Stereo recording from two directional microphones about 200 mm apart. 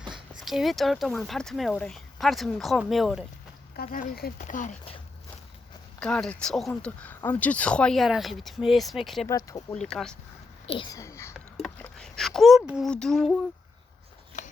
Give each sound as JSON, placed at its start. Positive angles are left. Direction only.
{"t": 0.1, "sound": "speech", "side_deg": 0}
{"t": 3.8, "sound": "speech", "side_deg": 50}
{"t": 6.0, "sound": "speech", "side_deg": 5}
{"t": 9.2, "sound": "speech", "side_deg": 15}
{"t": 9.7, "sound": "speech", "side_deg": 5}
{"t": 10.7, "sound": "speech", "side_deg": 20}
{"t": 11.6, "sound": "a sound", "side_deg": 0}